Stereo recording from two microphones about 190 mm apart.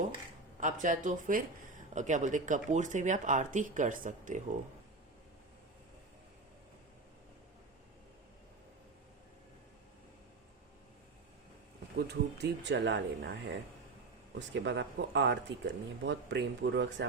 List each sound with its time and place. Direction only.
0.6 s speech: 40° right (ahead or behind)
11.9 s speech: 60° right (ahead or behind)
14.3 s speech: 70° right (ahead or behind)